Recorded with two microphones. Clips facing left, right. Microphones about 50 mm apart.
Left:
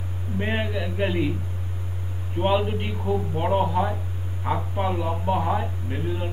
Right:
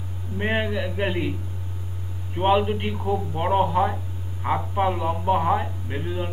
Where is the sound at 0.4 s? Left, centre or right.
Right.